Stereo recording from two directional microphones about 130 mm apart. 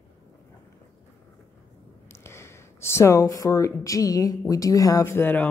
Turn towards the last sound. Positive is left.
turn(degrees=15)  # may be behind; listen again after turning